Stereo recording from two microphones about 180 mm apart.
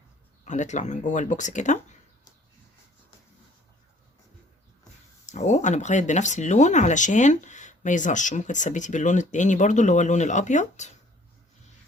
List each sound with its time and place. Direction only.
0.4 s speech: 45° left (ahead or behind)
5.3 s speech: 40° left (ahead or behind)